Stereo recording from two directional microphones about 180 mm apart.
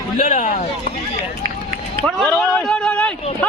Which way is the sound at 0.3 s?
45° left (ahead or behind).